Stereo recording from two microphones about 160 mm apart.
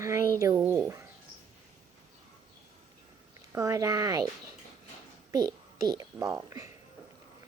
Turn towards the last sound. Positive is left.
turn(degrees=-15)  # may be behind; listen again after turning